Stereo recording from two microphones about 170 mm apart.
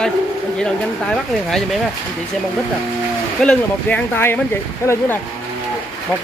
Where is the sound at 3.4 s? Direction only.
5° left (ahead or behind).